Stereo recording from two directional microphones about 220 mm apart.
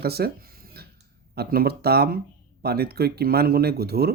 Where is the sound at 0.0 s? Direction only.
45° right (ahead or behind).